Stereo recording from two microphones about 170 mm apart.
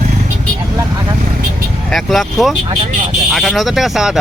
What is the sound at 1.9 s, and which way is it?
Speech, centre (ahead or behind).